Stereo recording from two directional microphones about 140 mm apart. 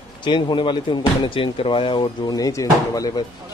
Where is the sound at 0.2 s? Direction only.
35° left (ahead or behind).